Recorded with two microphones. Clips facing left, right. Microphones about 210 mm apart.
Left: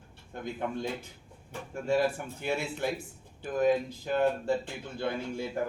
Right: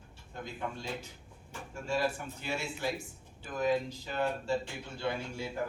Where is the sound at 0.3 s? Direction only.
55° left (ahead or behind).